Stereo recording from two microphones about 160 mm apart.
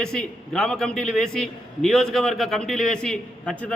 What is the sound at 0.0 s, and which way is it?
A man's voice, 5° left (ahead or behind).